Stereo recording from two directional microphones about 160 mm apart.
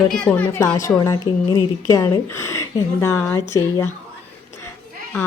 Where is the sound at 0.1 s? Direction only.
10° left (ahead or behind).